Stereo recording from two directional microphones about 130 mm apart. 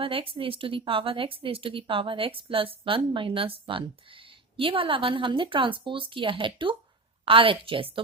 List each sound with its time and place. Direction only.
0.0 s a woman's voice: 45° right (ahead or behind)